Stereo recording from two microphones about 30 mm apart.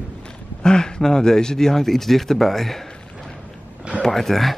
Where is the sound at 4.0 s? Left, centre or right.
Centre.